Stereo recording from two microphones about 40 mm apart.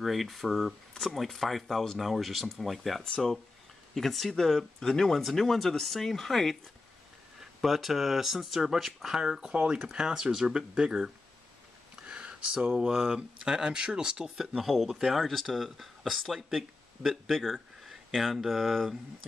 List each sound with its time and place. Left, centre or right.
0.0 s speech: centre
7.6 s speech: centre
11.9 s a sound: right
12.8 s speech: centre